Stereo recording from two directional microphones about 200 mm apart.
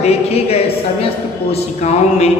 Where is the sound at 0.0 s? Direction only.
30° left (ahead or behind).